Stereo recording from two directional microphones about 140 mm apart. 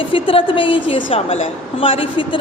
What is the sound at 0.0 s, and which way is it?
A woman's voice, 40° left (ahead or behind).